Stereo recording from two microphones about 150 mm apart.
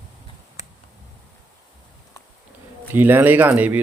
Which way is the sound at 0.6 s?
50° left (ahead or behind).